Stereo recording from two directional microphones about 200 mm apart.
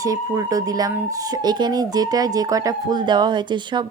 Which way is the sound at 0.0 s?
15° right (ahead or behind).